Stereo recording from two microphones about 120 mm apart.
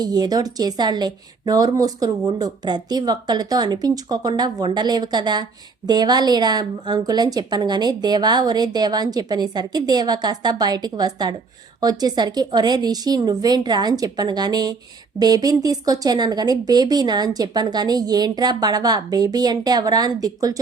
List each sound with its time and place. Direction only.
0.0 s speech: 35° right (ahead or behind)